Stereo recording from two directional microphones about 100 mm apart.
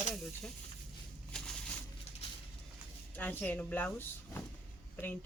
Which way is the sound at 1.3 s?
5° left (ahead or behind).